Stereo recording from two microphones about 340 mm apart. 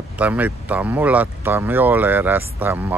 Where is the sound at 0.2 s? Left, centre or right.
Centre.